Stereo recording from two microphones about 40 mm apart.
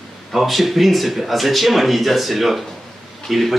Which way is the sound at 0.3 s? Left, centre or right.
Centre.